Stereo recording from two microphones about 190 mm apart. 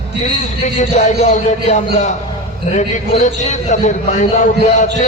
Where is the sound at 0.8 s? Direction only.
40° left (ahead or behind).